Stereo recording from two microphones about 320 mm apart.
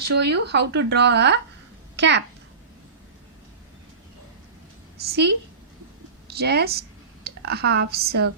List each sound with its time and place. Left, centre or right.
0.1 s speech: right
5.0 s speech: right